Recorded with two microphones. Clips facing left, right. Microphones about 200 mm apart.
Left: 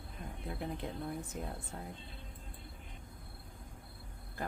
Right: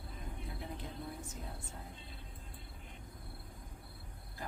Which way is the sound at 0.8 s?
60° left (ahead or behind).